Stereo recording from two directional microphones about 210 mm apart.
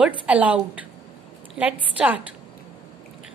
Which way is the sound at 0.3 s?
5° right (ahead or behind).